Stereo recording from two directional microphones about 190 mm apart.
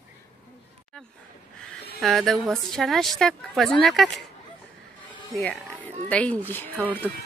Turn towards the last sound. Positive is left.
turn(degrees=10)  # may be behind; listen again after turning